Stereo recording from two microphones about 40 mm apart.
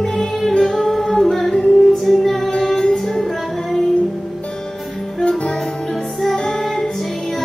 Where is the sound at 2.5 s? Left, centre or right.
Centre.